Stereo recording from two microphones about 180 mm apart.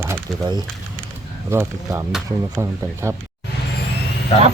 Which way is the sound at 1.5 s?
15° right (ahead or behind).